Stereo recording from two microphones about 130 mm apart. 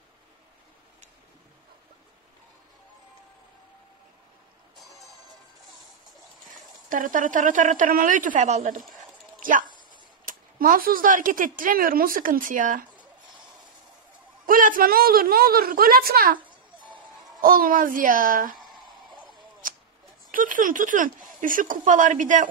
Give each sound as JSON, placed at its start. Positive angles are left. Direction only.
{"t": 6.9, "sound": "a woman's voice", "side_deg": -90}
{"t": 14.4, "sound": "speech", "side_deg": -90}
{"t": 17.4, "sound": "speech", "side_deg": -90}
{"t": 20.2, "sound": "a woman's voice", "side_deg": -90}